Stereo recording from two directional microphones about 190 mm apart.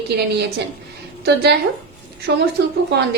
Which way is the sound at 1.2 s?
60° right (ahead or behind).